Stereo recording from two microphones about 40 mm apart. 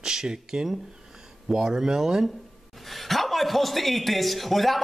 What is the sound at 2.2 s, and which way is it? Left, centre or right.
A man's voice, centre.